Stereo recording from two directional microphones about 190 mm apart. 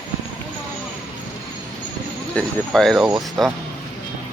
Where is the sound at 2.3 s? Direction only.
Centre (ahead or behind).